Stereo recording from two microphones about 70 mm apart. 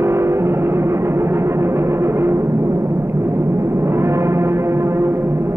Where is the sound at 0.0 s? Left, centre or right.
Right.